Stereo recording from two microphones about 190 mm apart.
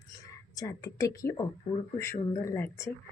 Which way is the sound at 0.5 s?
15° left (ahead or behind).